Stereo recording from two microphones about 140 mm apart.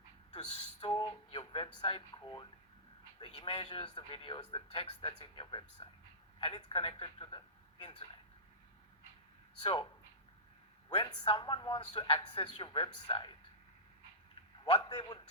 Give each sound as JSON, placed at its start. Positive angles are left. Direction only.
{"t": 0.8, "sound": "a sound", "side_deg": 35}
{"t": 3.2, "sound": "speech", "side_deg": 40}
{"t": 9.6, "sound": "speech", "side_deg": 35}
{"t": 10.9, "sound": "speech", "side_deg": 35}
{"t": 14.6, "sound": "a man's voice", "side_deg": 35}